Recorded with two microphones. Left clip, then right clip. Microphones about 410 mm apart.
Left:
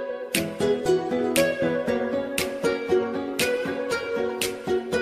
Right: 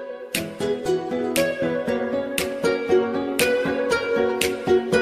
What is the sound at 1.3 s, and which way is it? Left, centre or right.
Music, centre.